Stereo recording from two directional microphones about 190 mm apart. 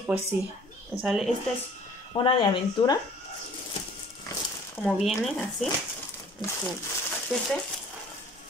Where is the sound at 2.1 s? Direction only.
25° left (ahead or behind).